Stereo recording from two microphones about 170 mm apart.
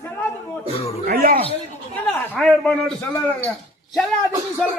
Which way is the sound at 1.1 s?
60° right (ahead or behind).